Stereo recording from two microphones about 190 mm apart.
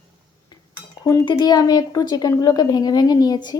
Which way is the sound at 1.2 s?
20° left (ahead or behind).